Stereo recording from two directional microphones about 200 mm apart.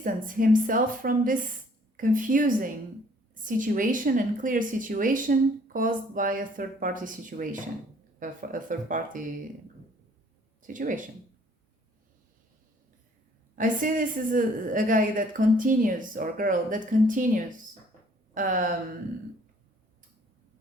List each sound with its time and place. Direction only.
0.0 s a woman's voice: 40° right (ahead or behind)
10.6 s speech: 40° right (ahead or behind)
13.6 s a woman's voice: 40° right (ahead or behind)